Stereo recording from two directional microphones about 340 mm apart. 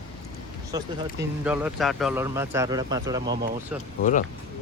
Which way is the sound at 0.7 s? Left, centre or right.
Centre.